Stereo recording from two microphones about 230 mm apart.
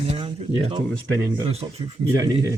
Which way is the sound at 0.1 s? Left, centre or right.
Right.